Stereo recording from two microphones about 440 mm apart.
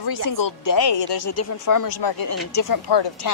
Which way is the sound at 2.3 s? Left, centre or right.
Left.